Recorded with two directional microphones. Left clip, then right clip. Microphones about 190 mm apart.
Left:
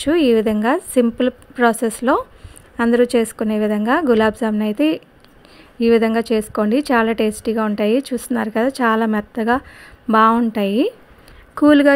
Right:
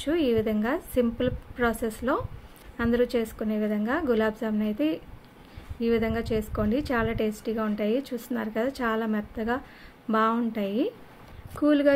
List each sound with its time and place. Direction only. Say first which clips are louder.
0.0 s a woman's voice: left 10 dB; 45° left (ahead or behind)